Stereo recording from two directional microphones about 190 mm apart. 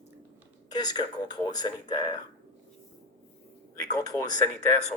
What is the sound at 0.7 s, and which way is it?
Speech, 20° left (ahead or behind).